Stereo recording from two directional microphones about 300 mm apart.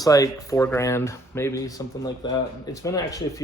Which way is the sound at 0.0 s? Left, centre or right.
Centre.